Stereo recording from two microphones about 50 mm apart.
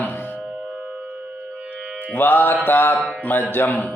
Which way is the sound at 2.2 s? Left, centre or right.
Left.